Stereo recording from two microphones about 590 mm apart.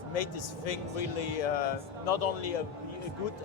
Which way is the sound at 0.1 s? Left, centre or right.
Left.